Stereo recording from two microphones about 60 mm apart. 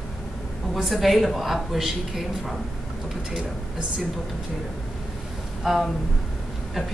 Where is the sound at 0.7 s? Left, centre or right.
Centre.